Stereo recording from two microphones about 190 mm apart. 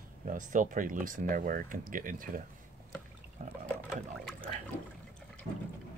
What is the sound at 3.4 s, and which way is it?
Water, 40° right (ahead or behind).